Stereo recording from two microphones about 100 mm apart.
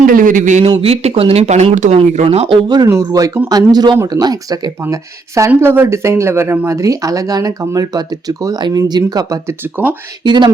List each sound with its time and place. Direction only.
0.6 s speech: 65° right (ahead or behind)
2.8 s speech: 35° right (ahead or behind)
9.5 s speech: 20° right (ahead or behind)
10.2 s speech: 50° right (ahead or behind)